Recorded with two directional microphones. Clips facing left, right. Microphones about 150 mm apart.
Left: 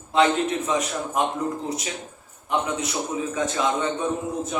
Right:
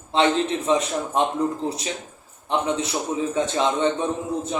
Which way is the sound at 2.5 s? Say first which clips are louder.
Right 2 dB; 30° right (ahead or behind).